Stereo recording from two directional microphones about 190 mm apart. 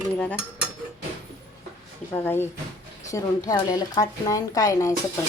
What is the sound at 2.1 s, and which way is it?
A woman's voice, 10° left (ahead or behind).